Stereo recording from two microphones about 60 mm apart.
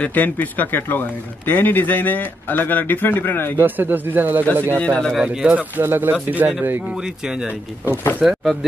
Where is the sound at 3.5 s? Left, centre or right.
Right.